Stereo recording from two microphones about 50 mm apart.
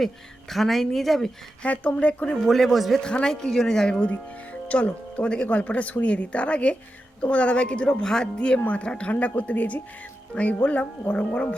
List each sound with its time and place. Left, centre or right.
0.0 s speech: centre
1.6 s speech: left
2.5 s speech: centre
3.0 s speech: centre
3.5 s speech: centre
4.1 s speech: left
7.9 s speech: centre